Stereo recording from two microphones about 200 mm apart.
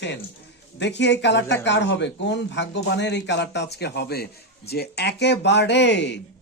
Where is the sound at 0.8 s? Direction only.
60° left (ahead or behind).